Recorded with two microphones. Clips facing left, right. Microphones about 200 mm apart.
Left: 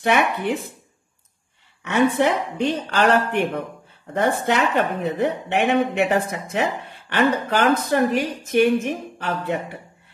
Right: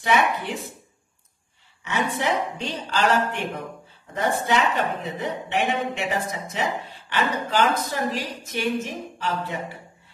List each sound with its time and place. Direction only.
0.0 s speech: 60° left (ahead or behind)
1.9 s speech: 55° left (ahead or behind)